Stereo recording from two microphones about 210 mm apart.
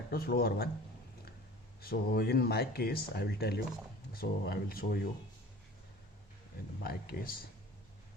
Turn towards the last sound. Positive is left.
turn(degrees=45)  # may be behind; listen again after turning